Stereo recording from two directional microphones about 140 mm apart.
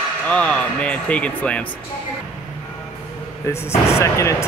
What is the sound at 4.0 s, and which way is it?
Speech, 20° left (ahead or behind).